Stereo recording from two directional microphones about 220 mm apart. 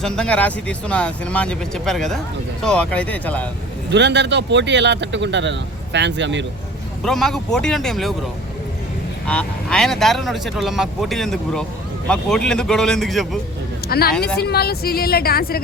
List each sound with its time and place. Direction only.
0.0 s speech: 5° left (ahead or behind)
3.8 s speech: 55° right (ahead or behind)
7.0 s speech: centre (ahead or behind)
9.2 s speech: 5° left (ahead or behind)
13.8 s a woman's voice: 45° left (ahead or behind)
14.1 s speech: 5° left (ahead or behind)
14.3 s speech: 45° left (ahead or behind)